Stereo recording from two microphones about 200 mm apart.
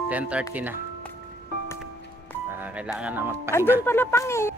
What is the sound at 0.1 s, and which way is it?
Speech, 5° right (ahead or behind).